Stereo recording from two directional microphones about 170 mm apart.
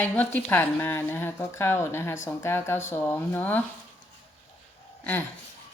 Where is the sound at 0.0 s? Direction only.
10° left (ahead or behind).